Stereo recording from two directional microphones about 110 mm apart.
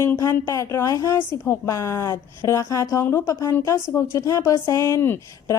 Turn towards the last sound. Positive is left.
turn(degrees=20)  # may be behind; listen again after turning